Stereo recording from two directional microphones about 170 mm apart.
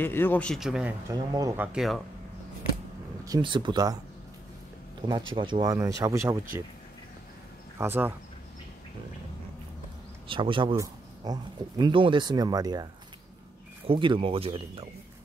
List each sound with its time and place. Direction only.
0.0 s speech: 10° left (ahead or behind); by 0.9 s 5° right (ahead or behind)
1.1 s speech: 20° right (ahead or behind); by 2.0 s 5° right (ahead or behind)
3.3 s speech: 25° right (ahead or behind)
5.0 s speech: 30° right (ahead or behind)
7.8 s speech: 10° right (ahead or behind)
10.2 s speech: 30° right (ahead or behind)
13.8 s speech: 30° right (ahead or behind)